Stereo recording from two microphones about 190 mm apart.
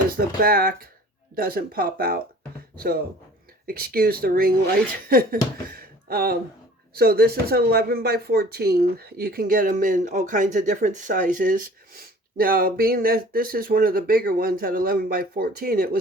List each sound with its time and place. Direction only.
0.4 s speech: 50° right (ahead or behind)